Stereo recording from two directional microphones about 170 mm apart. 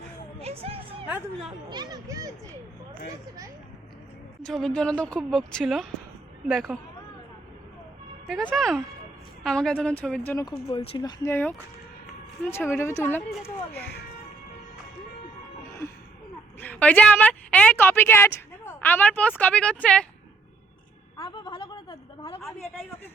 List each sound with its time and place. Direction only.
0.3 s music: 35° right (ahead or behind)
0.9 s music: 10° right (ahead or behind)
1.5 s speech: 25° right (ahead or behind)
4.4 s speech: 5° left (ahead or behind)
8.5 s a woman's voice: centre (ahead or behind)
10.7 s speech: 30° left (ahead or behind)
11.3 s a woman's voice: 10° left (ahead or behind)
16.6 s a woman's voice: 10° left (ahead or behind)
21.2 s a sound: 25° left (ahead or behind)